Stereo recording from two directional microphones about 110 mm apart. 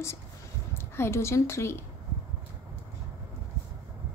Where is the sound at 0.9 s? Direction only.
25° left (ahead or behind).